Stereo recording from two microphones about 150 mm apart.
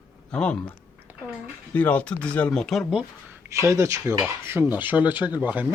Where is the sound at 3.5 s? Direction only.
20° right (ahead or behind).